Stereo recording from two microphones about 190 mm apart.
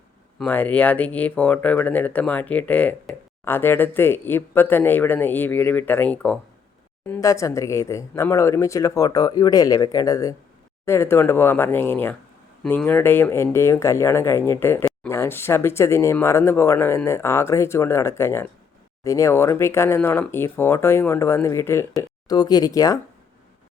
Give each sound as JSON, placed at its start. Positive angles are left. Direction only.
{"t": 0.3, "sound": "speech", "side_deg": 10}